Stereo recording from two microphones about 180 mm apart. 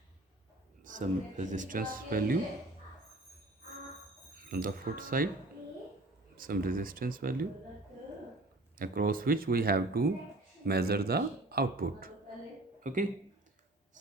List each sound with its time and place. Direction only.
0.9 s speech: 45° right (ahead or behind)
4.4 s speech: 55° right (ahead or behind)
6.3 s speech: 50° right (ahead or behind)
8.8 s speech: 55° right (ahead or behind)